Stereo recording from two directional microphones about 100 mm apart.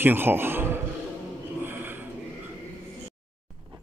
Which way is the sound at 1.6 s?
20° right (ahead or behind).